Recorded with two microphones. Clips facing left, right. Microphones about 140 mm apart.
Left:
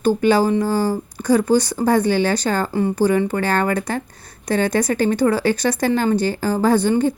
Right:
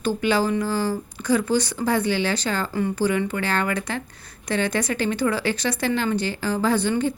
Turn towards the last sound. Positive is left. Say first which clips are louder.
# left 5 dB
turn(degrees=40)  # may be behind; listen again after turning